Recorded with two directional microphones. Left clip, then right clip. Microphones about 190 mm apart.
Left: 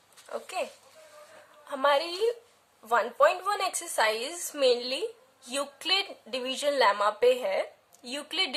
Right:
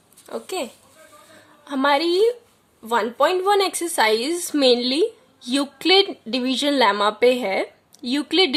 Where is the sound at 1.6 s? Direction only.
25° right (ahead or behind).